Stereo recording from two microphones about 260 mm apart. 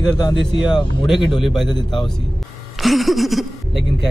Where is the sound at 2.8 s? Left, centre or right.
Centre.